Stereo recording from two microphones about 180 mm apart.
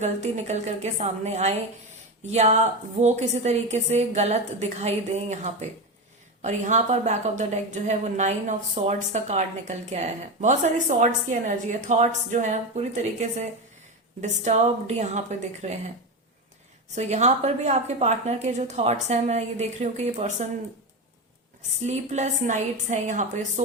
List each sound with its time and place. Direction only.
0.0 s a woman's voice: 40° right (ahead or behind)
16.9 s a woman's voice: 40° right (ahead or behind)
21.8 s a woman's voice: 40° right (ahead or behind)